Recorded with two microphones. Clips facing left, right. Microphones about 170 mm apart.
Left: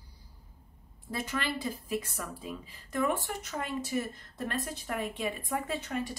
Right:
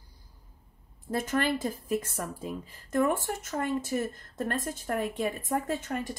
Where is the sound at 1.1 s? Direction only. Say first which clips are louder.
Right 6 dB; 50° right (ahead or behind).